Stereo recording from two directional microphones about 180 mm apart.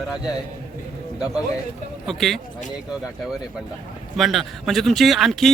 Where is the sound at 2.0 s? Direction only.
Centre (ahead or behind).